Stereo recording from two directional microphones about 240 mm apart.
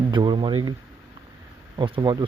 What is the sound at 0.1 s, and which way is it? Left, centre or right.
Speech, centre.